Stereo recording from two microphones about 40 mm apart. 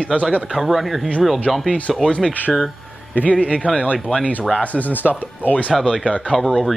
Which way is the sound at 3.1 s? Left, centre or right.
Left.